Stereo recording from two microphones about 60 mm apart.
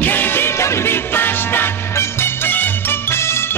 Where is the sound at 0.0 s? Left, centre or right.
Left.